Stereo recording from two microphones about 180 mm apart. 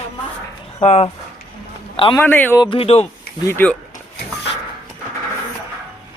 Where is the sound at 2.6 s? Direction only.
30° left (ahead or behind).